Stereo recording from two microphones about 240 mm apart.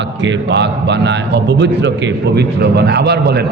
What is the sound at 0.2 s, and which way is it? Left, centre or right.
A man's voice, right.